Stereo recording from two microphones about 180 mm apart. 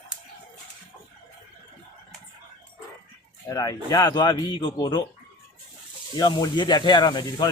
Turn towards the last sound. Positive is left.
turn(degrees=25)  # may be behind; listen again after turning